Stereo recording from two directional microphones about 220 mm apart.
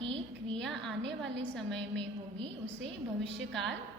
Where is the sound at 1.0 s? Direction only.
55° right (ahead or behind).